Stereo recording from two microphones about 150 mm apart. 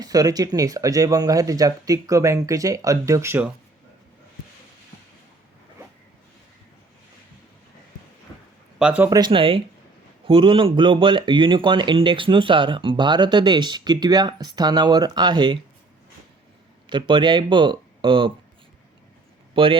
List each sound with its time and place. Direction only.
0.0 s speech: 25° right (ahead or behind)
8.8 s speech: 10° right (ahead or behind)
9.0 s speech: 25° right (ahead or behind)
16.9 s speech: 30° right (ahead or behind)
19.5 s speech: 35° right (ahead or behind)